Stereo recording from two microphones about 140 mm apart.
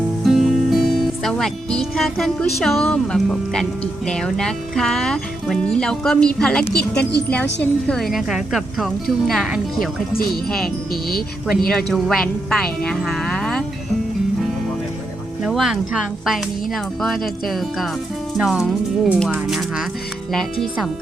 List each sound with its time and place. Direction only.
0.3 s speech: centre (ahead or behind)
11.1 s speech: 90° left
11.9 s speech: centre (ahead or behind)
15.4 s speech: centre (ahead or behind)